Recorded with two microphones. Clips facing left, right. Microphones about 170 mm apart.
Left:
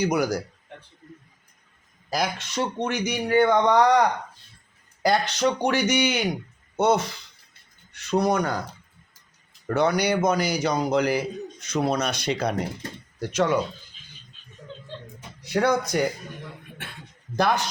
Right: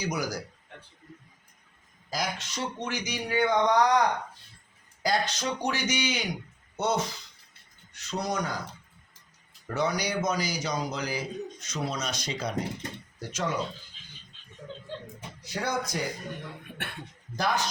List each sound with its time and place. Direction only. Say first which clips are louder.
0.0 s speech: left 8 dB; 60° left (ahead or behind)
2.0 s speech: left 6 dB; 65° left (ahead or behind)
5.0 s speech: left 6 dB; 65° left (ahead or behind)
9.6 s speech: left 7 dB; 60° left (ahead or behind)
15.4 s speech: left 9 dB; 65° left (ahead or behind)
17.3 s speech: left 6 dB; 60° left (ahead or behind)